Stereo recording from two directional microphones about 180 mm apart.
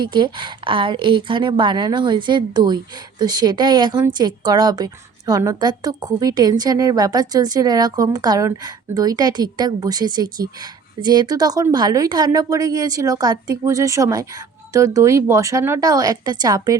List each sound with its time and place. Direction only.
0.0 s a woman's voice: 25° right (ahead or behind)